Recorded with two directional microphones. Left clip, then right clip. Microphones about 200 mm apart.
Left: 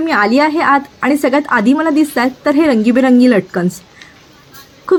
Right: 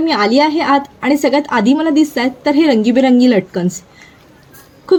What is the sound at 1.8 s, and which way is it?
Speech, 35° left (ahead or behind).